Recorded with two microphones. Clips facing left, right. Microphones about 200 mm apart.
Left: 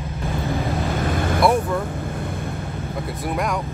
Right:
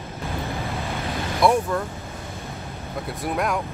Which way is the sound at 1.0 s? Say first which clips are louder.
Left 6 dB; 50° left (ahead or behind).